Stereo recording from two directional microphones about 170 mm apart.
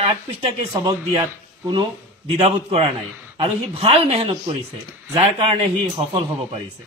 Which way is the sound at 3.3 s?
35° right (ahead or behind).